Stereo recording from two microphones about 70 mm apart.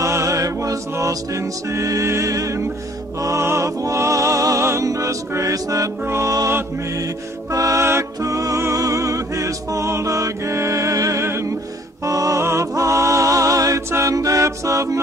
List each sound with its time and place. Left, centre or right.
0.0 s music: right
6.0 s music: right
7.5 s music: right
12.0 s music: right